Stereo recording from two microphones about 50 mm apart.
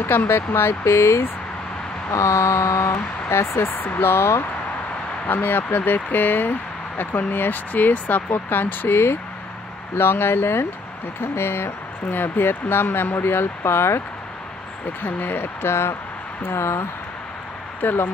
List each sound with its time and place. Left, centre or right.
0.3 s speech: left
2.0 s speech: left
3.6 s speech: left
5.2 s speech: left
12.1 s speech: left
15.0 s speech: left
15.7 s speech: left
17.8 s speech: left